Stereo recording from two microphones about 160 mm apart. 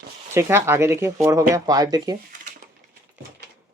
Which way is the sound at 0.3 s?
15° right (ahead or behind).